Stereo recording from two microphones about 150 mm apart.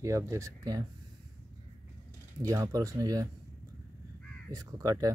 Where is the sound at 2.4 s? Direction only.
20° right (ahead or behind).